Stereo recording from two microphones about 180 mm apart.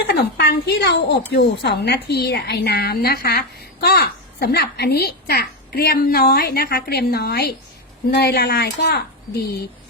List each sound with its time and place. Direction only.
0.1 s a woman's voice: 60° left (ahead or behind)